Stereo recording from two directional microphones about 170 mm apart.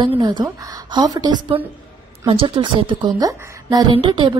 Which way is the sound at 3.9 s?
30° right (ahead or behind).